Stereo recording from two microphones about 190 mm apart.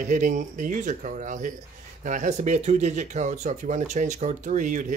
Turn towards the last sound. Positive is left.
turn(degrees=-40)  # may be behind; listen again after turning